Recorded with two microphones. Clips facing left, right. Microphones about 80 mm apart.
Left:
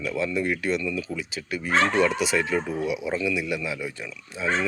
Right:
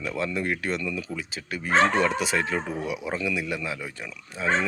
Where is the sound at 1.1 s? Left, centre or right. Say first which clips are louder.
Left 2 dB; right.